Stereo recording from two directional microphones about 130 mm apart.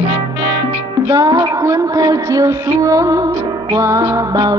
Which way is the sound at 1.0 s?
30° right (ahead or behind).